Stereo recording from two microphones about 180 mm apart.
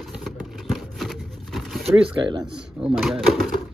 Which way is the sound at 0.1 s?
Centre (ahead or behind).